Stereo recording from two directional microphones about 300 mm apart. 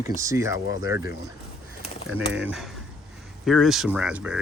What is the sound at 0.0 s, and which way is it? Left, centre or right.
Speech, centre.